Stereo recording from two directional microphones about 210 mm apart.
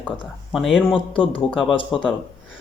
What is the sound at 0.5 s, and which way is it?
Speech, centre (ahead or behind).